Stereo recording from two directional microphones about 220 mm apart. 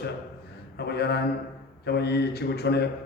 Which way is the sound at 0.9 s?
50° left (ahead or behind).